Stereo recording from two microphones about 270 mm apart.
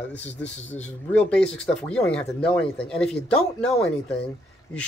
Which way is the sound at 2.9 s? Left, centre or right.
Centre.